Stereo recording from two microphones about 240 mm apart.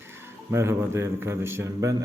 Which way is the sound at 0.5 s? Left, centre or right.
Centre.